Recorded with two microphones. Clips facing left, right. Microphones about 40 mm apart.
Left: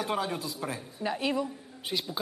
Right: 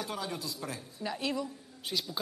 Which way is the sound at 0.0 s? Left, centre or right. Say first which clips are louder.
Left 6 dB; left.